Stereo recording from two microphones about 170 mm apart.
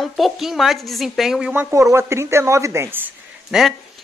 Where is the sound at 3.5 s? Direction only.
5° right (ahead or behind).